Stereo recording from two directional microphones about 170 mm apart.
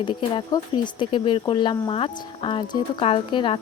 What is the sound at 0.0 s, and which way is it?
Mantra, 30° left (ahead or behind).